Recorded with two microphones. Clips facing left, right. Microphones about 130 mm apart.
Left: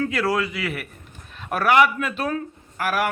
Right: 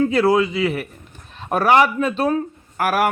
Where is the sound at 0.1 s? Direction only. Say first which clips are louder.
Right 7 dB; 25° right (ahead or behind).